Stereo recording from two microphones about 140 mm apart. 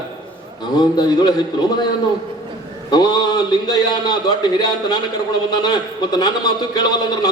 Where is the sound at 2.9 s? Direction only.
30° left (ahead or behind).